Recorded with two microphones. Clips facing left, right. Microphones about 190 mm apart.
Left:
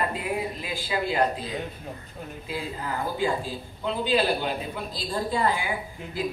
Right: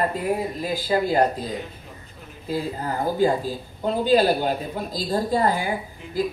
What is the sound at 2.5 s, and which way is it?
Speech, 40° right (ahead or behind).